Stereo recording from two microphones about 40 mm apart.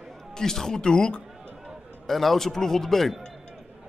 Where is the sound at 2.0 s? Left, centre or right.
Centre.